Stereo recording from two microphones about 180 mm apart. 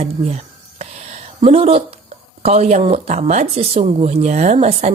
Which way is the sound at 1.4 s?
35° right (ahead or behind).